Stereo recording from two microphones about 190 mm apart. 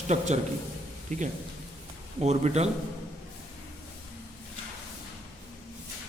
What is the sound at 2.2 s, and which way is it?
Speech, 35° right (ahead or behind).